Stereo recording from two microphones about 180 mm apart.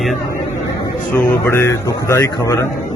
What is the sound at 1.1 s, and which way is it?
A man's voice, 15° left (ahead or behind).